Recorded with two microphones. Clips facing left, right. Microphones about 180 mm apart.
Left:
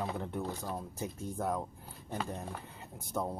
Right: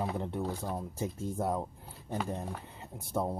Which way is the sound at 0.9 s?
25° right (ahead or behind).